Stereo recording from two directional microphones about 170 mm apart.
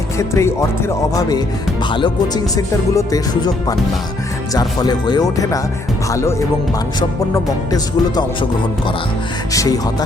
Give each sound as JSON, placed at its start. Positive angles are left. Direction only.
{"t": 0.2, "sound": "speech", "side_deg": 15}
{"t": 1.9, "sound": "speech", "side_deg": 25}
{"t": 7.3, "sound": "speech", "side_deg": 20}
{"t": 9.5, "sound": "speech", "side_deg": 20}